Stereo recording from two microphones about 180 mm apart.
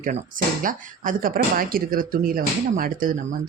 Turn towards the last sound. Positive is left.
turn(degrees=-50)  # may be behind; listen again after turning